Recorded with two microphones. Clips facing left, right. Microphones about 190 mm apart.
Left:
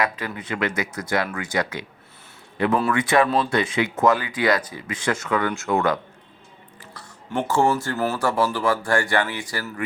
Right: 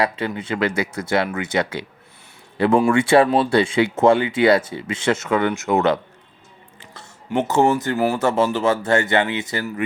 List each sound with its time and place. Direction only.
0.0 s speech: 30° right (ahead or behind)